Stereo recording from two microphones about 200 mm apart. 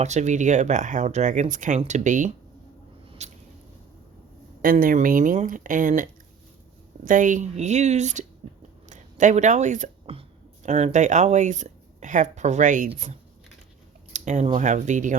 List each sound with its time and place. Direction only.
0.0 s speech: 35° right (ahead or behind)
3.2 s squish: 35° right (ahead or behind)
4.6 s speech: 45° right (ahead or behind)
14.1 s speech: 35° right (ahead or behind)